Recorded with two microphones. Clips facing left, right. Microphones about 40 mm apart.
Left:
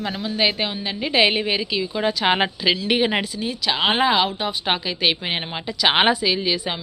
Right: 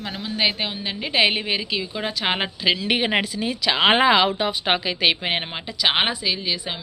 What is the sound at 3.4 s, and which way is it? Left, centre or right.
Speech, right.